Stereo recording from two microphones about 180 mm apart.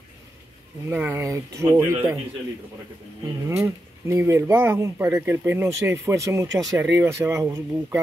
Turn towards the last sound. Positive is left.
turn(degrees=-15)  # may be behind; listen again after turning